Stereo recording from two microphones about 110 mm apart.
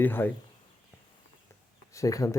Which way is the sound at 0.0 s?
20° left (ahead or behind).